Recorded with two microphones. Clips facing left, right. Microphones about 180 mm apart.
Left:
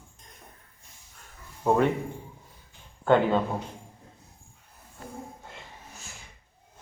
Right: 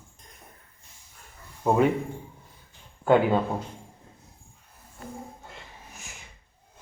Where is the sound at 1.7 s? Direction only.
10° right (ahead or behind).